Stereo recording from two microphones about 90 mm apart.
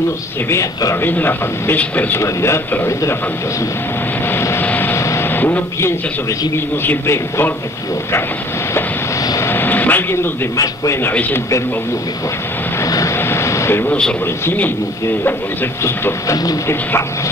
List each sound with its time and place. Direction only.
0.5 s speech: 35° left (ahead or behind)
1.0 s speech: 20° left (ahead or behind)
2.2 s speech: 30° left (ahead or behind)
4.3 s vehicle: 25° left (ahead or behind)
4.9 s vehicle: 30° left (ahead or behind)
6.5 s speech: 25° left (ahead or behind)
9.4 s vehicle: 25° left (ahead or behind)
10.6 s speech: 40° left (ahead or behind)
11.0 s speech: 20° left (ahead or behind)
12.8 s vehicle: 35° left (ahead or behind)
14.2 s speech: 25° left (ahead or behind)